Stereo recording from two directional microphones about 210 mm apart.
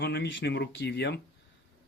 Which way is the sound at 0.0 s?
55° left (ahead or behind).